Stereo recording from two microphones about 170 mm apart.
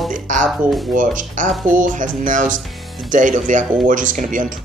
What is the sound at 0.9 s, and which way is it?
Speech, 50° right (ahead or behind).